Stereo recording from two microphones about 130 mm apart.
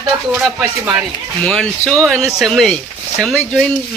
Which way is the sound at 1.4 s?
5° left (ahead or behind).